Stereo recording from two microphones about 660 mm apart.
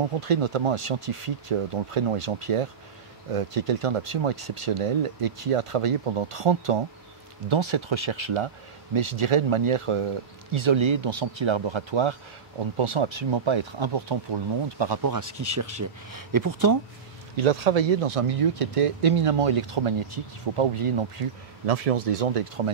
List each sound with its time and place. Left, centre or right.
0.2 s speech: right
17.4 s speech: right